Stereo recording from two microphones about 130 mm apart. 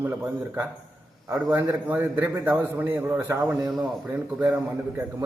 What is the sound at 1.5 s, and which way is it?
A man's voice, 15° right (ahead or behind).